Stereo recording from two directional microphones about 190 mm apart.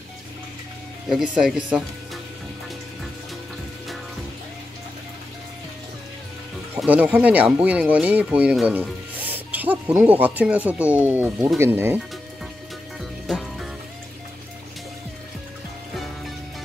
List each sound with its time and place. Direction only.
1.0 s speech: 5° right (ahead or behind)
6.8 s speech: 5° right (ahead or behind)
13.3 s music: centre (ahead or behind)